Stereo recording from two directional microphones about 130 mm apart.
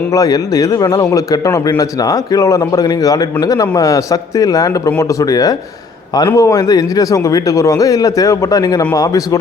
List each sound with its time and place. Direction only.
0.1 s speech: 25° left (ahead or behind)